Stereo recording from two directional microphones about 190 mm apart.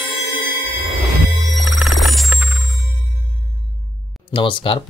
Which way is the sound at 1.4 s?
Centre (ahead or behind).